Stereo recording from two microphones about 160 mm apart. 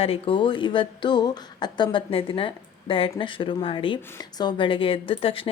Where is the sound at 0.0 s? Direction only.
35° left (ahead or behind).